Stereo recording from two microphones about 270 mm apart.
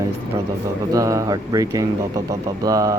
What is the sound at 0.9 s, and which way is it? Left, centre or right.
Speech, centre.